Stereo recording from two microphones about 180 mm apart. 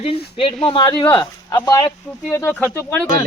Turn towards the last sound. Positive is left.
turn(degrees=10)  # may be behind; listen again after turning